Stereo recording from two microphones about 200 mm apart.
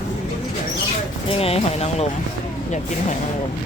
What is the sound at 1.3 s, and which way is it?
Speech, 30° left (ahead or behind).